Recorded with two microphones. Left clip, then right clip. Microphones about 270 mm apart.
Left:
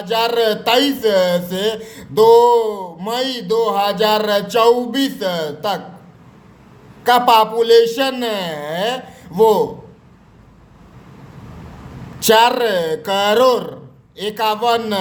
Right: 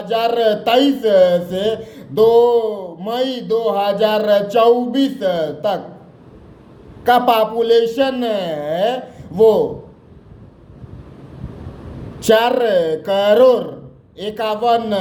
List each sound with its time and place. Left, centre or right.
0.0 s speech: centre
7.0 s speech: centre
12.2 s speech: centre